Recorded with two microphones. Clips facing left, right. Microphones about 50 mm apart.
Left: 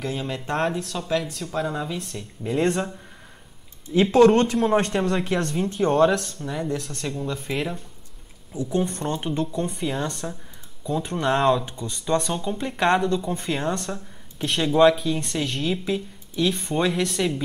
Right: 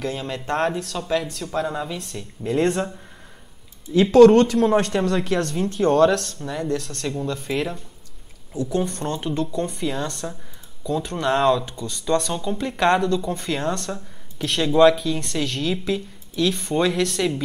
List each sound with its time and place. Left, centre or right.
0.0 s speech: centre
3.9 s speech: left
10.2 s speech: centre
10.9 s speech: left
11.3 s speech: centre
11.6 s speech: left
13.9 s speech: centre
15.0 s speech: centre